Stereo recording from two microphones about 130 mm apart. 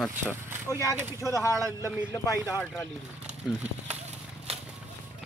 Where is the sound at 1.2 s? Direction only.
25° left (ahead or behind).